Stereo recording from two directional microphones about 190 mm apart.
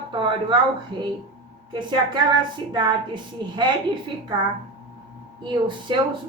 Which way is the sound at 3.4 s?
25° right (ahead or behind).